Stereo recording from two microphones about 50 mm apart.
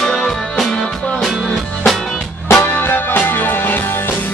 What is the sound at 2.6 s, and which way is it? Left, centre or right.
Music, left.